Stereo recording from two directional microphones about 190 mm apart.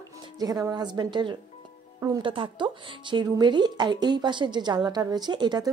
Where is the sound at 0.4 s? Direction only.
20° right (ahead or behind).